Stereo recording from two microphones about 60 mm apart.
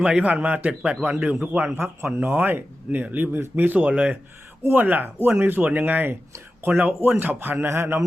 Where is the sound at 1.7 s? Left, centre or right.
Right; by 4.1 s centre.